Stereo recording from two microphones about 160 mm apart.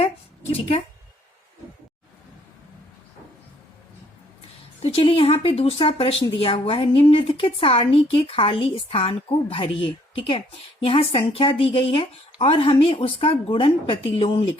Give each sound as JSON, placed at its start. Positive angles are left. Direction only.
{"t": 4.8, "sound": "speech", "side_deg": 35}